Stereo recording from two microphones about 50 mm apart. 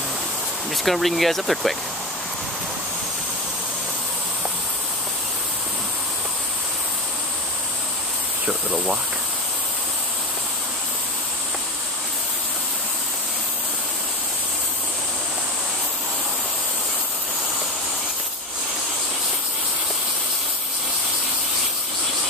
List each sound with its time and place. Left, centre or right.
0.8 s speech: centre
8.5 s speech: centre